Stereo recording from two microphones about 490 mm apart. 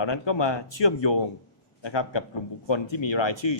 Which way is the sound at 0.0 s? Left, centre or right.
Left.